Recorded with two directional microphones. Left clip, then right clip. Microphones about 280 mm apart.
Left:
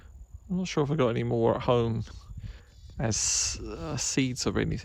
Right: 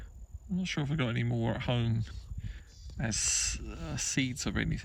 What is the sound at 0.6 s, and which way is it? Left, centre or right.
Speech, centre.